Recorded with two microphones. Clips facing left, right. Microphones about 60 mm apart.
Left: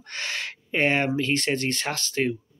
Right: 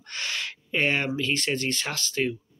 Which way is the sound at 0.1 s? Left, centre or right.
Left.